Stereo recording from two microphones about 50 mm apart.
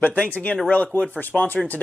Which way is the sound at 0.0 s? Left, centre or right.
Left.